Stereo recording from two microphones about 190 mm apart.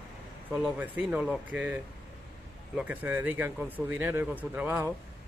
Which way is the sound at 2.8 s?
10° right (ahead or behind).